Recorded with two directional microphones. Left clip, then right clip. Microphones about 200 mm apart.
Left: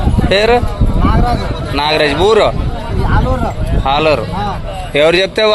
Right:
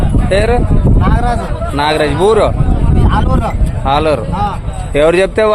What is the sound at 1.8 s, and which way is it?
Speech, 10° right (ahead or behind).